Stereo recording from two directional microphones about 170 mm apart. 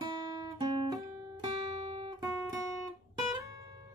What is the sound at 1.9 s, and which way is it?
Guitar, 30° right (ahead or behind).